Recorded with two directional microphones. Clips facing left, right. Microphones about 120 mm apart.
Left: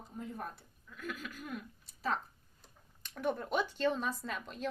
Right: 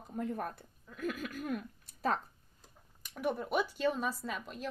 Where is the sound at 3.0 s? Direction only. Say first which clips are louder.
Even; 10° right (ahead or behind).